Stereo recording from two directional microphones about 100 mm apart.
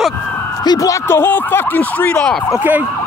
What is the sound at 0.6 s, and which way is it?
Speech, 35° left (ahead or behind).